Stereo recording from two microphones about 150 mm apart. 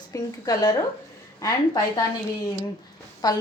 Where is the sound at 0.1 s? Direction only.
25° left (ahead or behind).